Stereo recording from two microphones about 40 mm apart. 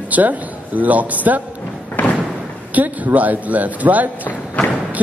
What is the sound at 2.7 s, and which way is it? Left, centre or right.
A man's voice, right.